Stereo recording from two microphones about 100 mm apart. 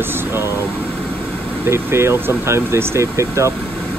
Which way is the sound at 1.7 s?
25° right (ahead or behind).